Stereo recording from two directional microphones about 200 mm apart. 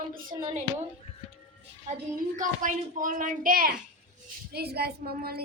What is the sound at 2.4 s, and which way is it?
A woman's voice, 40° right (ahead or behind).